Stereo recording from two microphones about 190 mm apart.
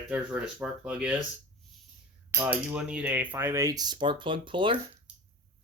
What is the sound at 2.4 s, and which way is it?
Speech, 5° right (ahead or behind).